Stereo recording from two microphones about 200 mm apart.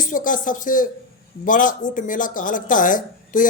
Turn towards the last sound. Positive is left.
turn(degrees=40)  # may be behind; listen again after turning